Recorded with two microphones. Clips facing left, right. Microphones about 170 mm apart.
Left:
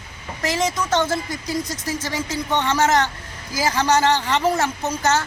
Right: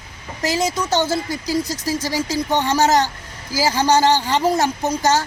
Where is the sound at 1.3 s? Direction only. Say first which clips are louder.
Right 4 dB; 30° right (ahead or behind).